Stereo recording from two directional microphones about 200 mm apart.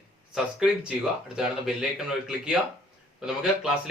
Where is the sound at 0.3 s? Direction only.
5° right (ahead or behind).